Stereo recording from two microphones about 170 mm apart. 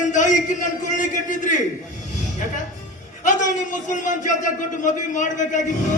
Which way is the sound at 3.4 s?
45° left (ahead or behind).